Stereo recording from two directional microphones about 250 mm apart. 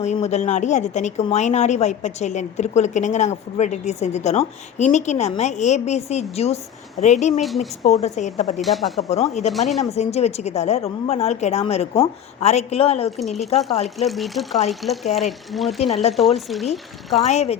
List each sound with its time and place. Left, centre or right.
0.0 s a woman's voice: left
7.4 s speech: centre
7.9 s a woman's voice: left
9.5 s speech: centre
9.9 s a woman's voice: left
13.1 s speech: centre
17.2 s a woman's voice: left